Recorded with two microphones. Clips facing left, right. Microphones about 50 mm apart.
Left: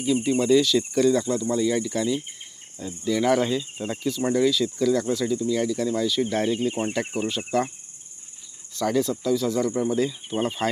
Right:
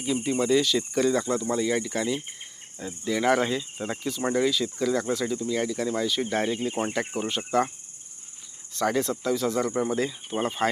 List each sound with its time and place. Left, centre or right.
0.0 s speech: right
7.2 s speech: right
8.7 s speech: right